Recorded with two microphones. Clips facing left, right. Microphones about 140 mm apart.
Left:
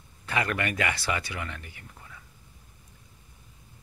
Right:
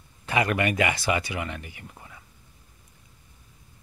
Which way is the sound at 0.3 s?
15° right (ahead or behind).